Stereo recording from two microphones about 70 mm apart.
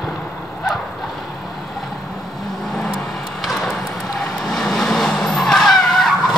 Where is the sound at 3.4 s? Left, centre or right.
Centre.